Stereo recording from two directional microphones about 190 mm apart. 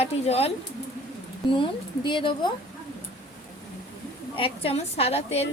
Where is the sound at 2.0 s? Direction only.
25° left (ahead or behind).